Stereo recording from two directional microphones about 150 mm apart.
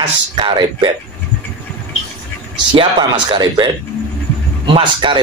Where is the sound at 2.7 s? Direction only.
30° right (ahead or behind).